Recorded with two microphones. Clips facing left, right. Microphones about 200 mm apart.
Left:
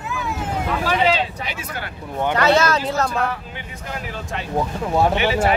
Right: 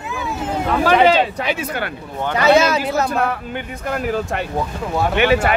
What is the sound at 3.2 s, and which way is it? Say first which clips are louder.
Speech: right 4 dB; 60° right (ahead or behind).